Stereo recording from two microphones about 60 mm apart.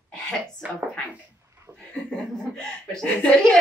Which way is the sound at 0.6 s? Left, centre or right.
Right.